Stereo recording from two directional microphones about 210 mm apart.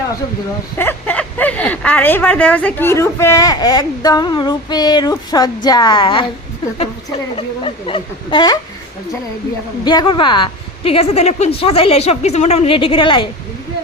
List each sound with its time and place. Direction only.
0.8 s a woman's voice: 10° left (ahead or behind)
7.3 s a woman's voice: 25° left (ahead or behind)
9.8 s a woman's voice: 20° left (ahead or behind)